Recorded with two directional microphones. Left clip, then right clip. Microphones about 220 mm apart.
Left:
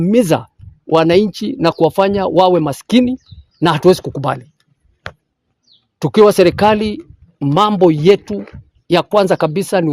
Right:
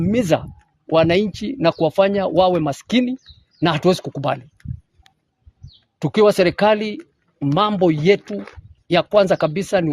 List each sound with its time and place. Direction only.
0.0 s speech: 50° left (ahead or behind)
6.0 s speech: 50° left (ahead or behind)